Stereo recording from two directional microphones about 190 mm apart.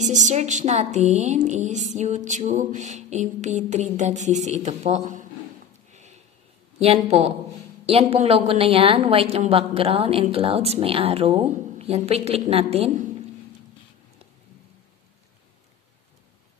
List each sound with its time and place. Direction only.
0.0 s a woman's voice: 40° right (ahead or behind)
7.1 s a woman's voice: 35° right (ahead or behind)